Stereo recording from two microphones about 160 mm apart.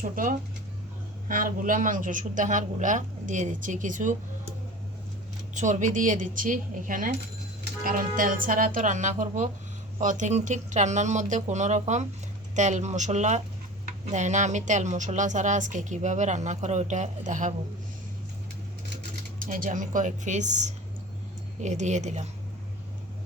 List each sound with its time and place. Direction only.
0.0 s a woman's voice: 60° right (ahead or behind)
5.5 s a woman's voice: 50° right (ahead or behind)
19.4 s a woman's voice: 60° right (ahead or behind)